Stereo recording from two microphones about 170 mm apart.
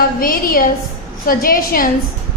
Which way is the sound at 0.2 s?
60° left (ahead or behind).